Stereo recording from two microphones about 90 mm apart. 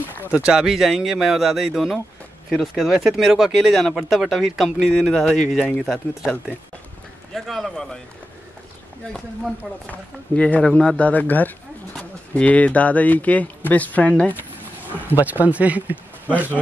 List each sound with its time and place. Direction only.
0.3 s speech: 10° right (ahead or behind)
7.3 s speech: centre (ahead or behind)
9.6 s speech: 15° left (ahead or behind)
15.1 s speech: 20° right (ahead or behind)